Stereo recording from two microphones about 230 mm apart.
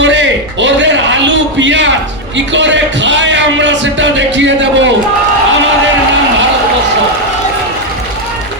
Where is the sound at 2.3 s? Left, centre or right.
Right.